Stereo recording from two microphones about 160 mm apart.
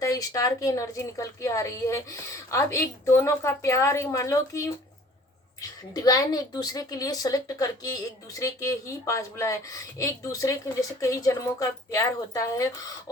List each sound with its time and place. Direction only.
0.0 s a woman's voice: 20° left (ahead or behind)